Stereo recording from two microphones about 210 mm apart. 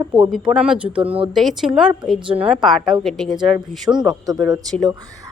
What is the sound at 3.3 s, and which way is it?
A man's voice, 20° right (ahead or behind).